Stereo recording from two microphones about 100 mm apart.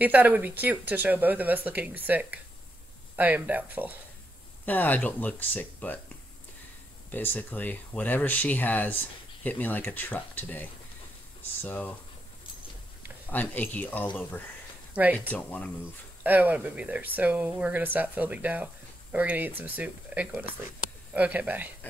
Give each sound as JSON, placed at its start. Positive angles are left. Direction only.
{"t": 0.0, "sound": "speech", "side_deg": -15}
{"t": 4.6, "sound": "speech", "side_deg": 15}
{"t": 7.1, "sound": "speech", "side_deg": 15}
{"t": 13.3, "sound": "speech", "side_deg": 15}
{"t": 15.2, "sound": "speech", "side_deg": 15}
{"t": 16.3, "sound": "speech", "side_deg": -15}